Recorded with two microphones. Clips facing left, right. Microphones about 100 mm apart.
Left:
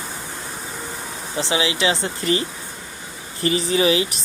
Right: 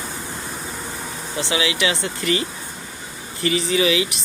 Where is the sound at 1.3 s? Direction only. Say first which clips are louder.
Left 1 dB; 30° left (ahead or behind).